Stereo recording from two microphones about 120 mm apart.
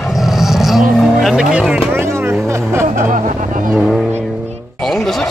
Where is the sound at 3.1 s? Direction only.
90° right.